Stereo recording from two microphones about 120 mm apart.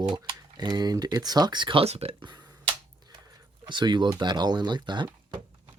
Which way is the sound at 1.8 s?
60° right (ahead or behind).